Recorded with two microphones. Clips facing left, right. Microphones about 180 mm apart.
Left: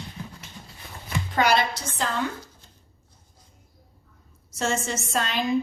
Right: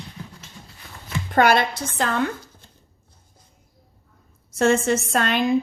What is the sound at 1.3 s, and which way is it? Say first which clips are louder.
Speech: right 5 dB; 55° right (ahead or behind).